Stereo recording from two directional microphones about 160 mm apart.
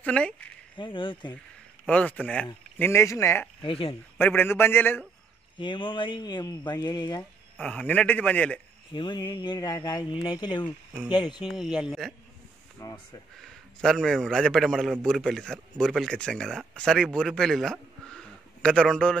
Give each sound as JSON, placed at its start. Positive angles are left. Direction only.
{"t": 0.0, "sound": "speech", "side_deg": 10}
{"t": 0.7, "sound": "speech", "side_deg": 30}
{"t": 1.9, "sound": "a man's voice", "side_deg": 10}
{"t": 3.6, "sound": "speech", "side_deg": 35}
{"t": 4.2, "sound": "a man's voice", "side_deg": 15}
{"t": 5.6, "sound": "speech", "side_deg": 30}
{"t": 7.5, "sound": "a man's voice", "side_deg": 5}
{"t": 8.9, "sound": "speech", "side_deg": 30}
{"t": 11.5, "sound": "a man's voice", "side_deg": -5}
{"t": 12.8, "sound": "speech", "side_deg": 20}
{"t": 13.4, "sound": "a man's voice", "side_deg": 5}